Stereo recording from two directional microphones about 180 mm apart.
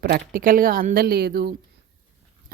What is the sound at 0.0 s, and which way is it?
Speech, 60° right (ahead or behind).